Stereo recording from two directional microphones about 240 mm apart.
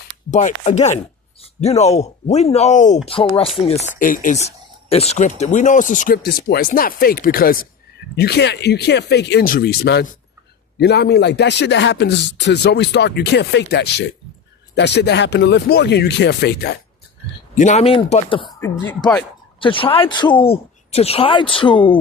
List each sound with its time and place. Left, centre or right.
0.3 s a woman's voice: left
17.5 s a woman's voice: left
19.5 s a woman's voice: left